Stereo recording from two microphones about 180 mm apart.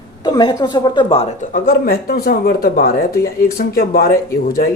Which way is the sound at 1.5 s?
50° left (ahead or behind).